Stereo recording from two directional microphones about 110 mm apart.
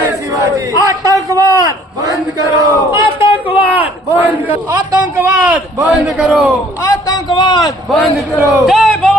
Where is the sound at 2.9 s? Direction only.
45° left (ahead or behind).